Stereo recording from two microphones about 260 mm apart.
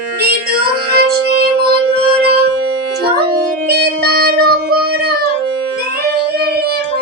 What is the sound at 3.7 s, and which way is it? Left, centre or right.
Music, right.